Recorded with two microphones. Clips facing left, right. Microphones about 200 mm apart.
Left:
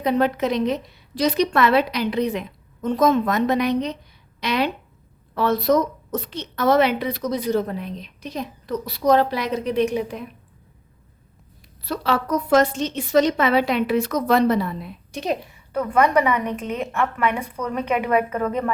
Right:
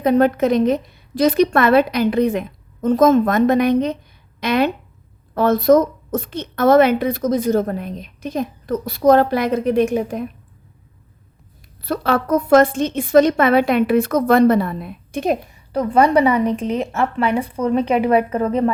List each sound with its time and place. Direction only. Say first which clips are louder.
0.0 s a woman's voice: right 5 dB; 45° right (ahead or behind)
11.8 s a woman's voice: right 4 dB; 55° right (ahead or behind)
15.7 s a woman's voice: right 4 dB; 35° right (ahead or behind)